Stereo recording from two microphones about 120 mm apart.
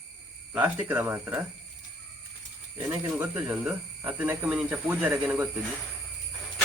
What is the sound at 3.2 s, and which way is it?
Speech, 15° right (ahead or behind).